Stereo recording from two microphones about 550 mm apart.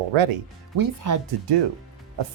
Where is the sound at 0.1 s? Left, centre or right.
Right.